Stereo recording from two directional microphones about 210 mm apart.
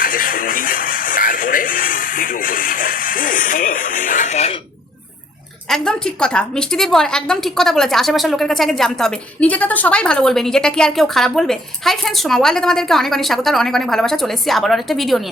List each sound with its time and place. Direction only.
0.0 s music: 40° left (ahead or behind)
5.6 s a woman's voice: 5° left (ahead or behind)